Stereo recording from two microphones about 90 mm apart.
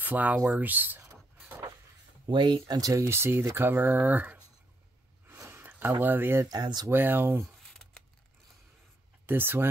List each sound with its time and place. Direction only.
0.0 s speech: 20° right (ahead or behind)
2.2 s speech: 60° right (ahead or behind); by 4.4 s 20° right (ahead or behind)
5.3 s a sound: 25° right (ahead or behind)
6.5 s speech: 50° right (ahead or behind)
6.9 s speech: 25° right (ahead or behind)
9.2 s speech: 25° right (ahead or behind)